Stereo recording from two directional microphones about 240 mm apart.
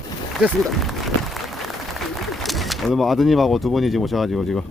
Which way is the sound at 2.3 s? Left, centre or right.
Centre.